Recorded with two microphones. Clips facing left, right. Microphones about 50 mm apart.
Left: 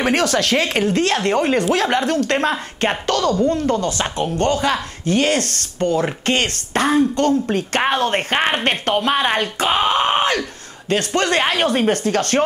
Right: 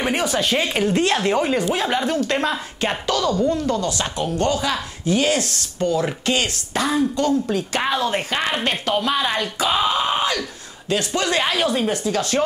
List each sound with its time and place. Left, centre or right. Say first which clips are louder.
0.0 s a woman's voice: left 3 dB; left
0.9 s speech: even; left
1.7 s speech: left 3 dB; left